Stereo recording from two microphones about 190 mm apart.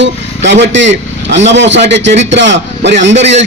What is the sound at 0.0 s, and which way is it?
Speech, 70° right (ahead or behind).